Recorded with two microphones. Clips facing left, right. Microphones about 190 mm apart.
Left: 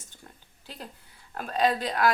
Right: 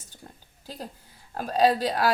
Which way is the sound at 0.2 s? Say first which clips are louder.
Right 4 dB; 25° right (ahead or behind).